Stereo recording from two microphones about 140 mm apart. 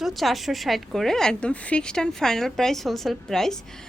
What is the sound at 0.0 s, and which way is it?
A woman's voice, centre (ahead or behind).